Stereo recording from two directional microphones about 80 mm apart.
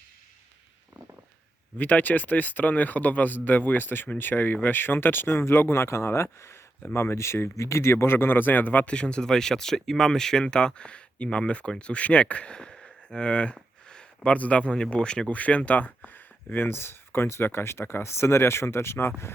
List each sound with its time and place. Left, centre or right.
1.8 s a man's voice: left